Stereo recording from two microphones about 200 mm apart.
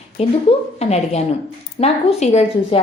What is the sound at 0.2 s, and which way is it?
A woman's voice, 30° left (ahead or behind).